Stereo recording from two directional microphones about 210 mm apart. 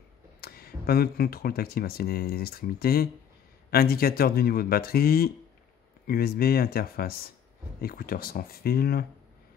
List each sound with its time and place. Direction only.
0.4 s speech: 45° left (ahead or behind)